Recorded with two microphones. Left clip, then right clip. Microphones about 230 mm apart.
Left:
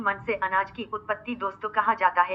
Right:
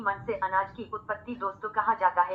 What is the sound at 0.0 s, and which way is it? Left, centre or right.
A woman's voice, left.